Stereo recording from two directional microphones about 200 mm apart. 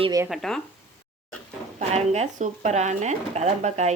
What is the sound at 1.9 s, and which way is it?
A woman's voice, 35° right (ahead or behind).